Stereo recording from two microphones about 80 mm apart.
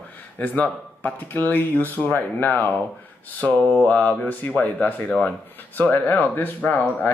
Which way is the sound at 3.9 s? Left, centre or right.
Centre.